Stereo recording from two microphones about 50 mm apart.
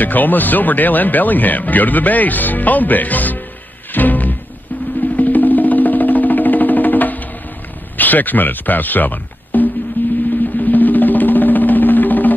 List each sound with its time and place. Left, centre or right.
0.0 s speech: left
3.9 s music: left
8.0 s speech: left
10.0 s music: left
10.6 s drum: left